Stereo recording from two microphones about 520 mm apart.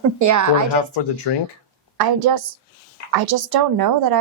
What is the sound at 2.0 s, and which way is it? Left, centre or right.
Speech, right.